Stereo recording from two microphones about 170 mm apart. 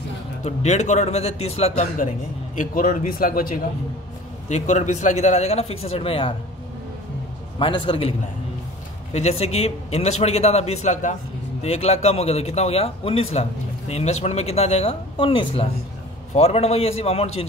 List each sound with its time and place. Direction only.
0.4 s a man's voice: 40° left (ahead or behind)
2.5 s a man's voice: 50° left (ahead or behind)
4.5 s a man's voice: 45° left (ahead or behind)
7.5 s a man's voice: 30° left (ahead or behind)
9.1 s a man's voice: 40° left (ahead or behind)